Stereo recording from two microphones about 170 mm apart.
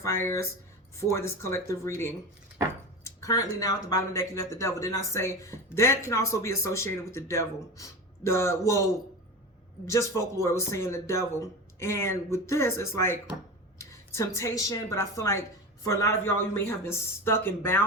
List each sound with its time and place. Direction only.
0.0 s speech: 15° left (ahead or behind)
3.0 s a sound: 20° left (ahead or behind)
3.6 s speech: 20° left (ahead or behind)
9.8 s a woman's voice: 15° left (ahead or behind)